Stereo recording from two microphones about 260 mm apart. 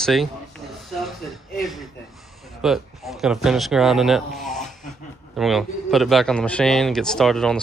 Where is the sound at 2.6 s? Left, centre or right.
Centre.